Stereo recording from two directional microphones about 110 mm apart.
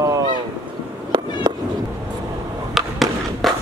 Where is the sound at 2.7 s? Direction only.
Centre (ahead or behind).